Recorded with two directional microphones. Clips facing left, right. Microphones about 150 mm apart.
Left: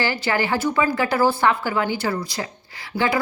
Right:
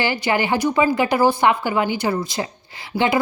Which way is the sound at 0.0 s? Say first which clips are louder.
Right 2 dB; 20° right (ahead or behind).